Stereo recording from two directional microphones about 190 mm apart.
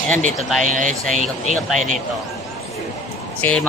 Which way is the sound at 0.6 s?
40° right (ahead or behind).